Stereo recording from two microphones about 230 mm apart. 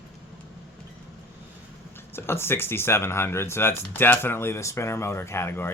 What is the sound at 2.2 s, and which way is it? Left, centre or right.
Speech, centre.